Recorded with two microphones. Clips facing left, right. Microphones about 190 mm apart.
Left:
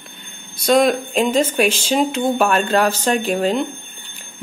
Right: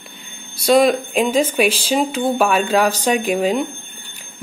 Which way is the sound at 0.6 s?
5° right (ahead or behind).